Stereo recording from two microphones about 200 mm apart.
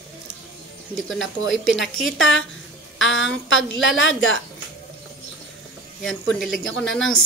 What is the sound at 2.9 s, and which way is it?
A woman's voice, 70° left (ahead or behind).